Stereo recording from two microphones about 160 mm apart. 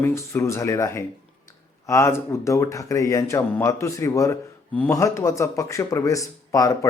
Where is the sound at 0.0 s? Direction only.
15° left (ahead or behind).